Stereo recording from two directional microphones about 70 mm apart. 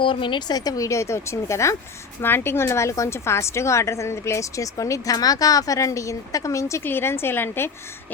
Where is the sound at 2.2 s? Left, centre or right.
Left.